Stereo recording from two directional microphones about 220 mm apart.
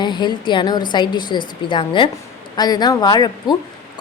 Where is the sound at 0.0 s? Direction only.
20° left (ahead or behind).